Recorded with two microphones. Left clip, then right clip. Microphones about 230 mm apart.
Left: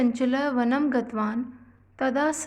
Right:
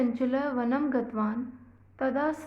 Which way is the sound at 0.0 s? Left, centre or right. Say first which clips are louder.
Left 4 dB; left.